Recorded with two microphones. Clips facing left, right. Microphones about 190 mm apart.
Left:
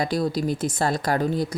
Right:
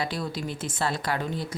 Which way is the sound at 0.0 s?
40° left (ahead or behind).